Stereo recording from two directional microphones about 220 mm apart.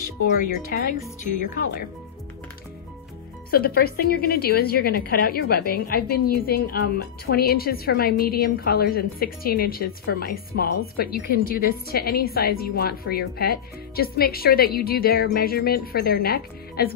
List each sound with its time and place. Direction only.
0.0 s speech: 40° left (ahead or behind)
3.4 s a woman's voice: 45° left (ahead or behind)